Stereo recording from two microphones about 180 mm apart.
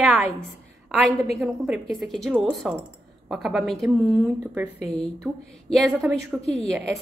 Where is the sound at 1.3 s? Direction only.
Centre (ahead or behind).